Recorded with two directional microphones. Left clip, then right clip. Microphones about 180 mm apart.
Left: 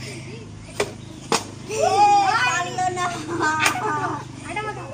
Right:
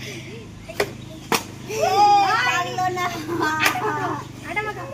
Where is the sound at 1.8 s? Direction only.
15° left (ahead or behind).